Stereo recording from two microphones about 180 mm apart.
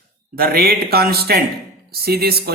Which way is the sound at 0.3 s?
55° right (ahead or behind).